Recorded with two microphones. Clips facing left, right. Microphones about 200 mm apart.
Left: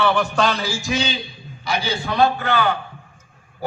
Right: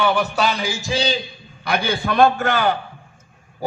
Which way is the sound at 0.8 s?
35° right (ahead or behind).